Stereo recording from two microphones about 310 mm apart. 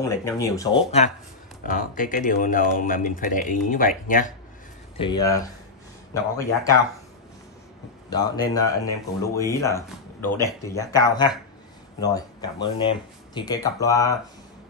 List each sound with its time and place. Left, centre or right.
0.0 s speech: centre
1.7 s speech: left
4.9 s speech: centre
8.4 s speech: centre